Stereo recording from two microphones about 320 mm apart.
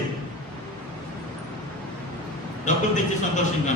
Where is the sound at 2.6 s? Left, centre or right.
Left.